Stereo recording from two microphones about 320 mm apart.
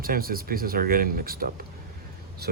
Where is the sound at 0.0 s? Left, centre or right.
Right.